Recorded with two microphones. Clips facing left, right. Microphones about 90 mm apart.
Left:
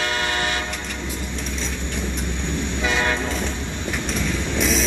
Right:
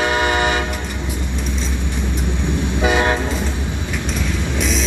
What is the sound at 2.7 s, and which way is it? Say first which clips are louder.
Train: right 6 dB; 15° right (ahead or behind).